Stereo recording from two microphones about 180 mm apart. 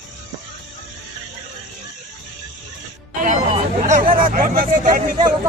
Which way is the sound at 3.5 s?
35° right (ahead or behind).